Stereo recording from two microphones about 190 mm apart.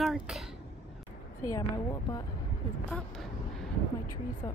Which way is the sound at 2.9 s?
5° left (ahead or behind).